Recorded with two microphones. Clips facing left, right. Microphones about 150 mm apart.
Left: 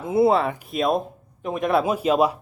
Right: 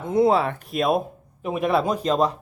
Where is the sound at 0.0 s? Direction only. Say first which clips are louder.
Even; 5° left (ahead or behind).